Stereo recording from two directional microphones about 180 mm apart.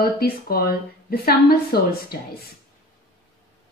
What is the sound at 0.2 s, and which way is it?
A woman's voice, 60° left (ahead or behind).